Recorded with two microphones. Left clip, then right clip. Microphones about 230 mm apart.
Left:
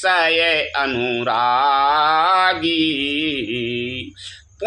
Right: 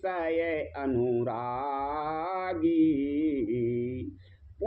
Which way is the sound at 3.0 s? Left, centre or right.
Left.